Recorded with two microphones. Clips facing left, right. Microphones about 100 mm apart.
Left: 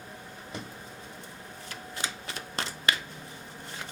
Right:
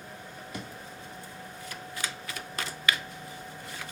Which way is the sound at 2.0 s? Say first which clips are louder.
Left 2 dB; 25° left (ahead or behind).